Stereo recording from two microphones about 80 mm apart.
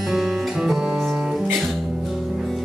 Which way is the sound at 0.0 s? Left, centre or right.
Centre.